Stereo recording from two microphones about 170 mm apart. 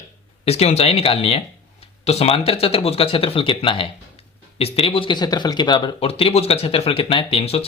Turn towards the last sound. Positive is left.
turn(degrees=35)  # may be behind; listen again after turning